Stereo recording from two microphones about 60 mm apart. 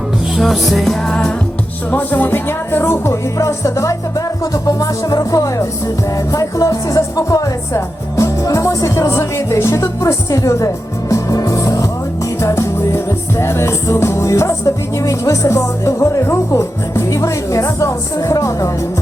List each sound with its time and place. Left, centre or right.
0.3 s music: centre
1.9 s music: left
3.3 s music: left
4.6 s speech: left
7.7 s music: left
11.1 s music: left
12.4 s music: left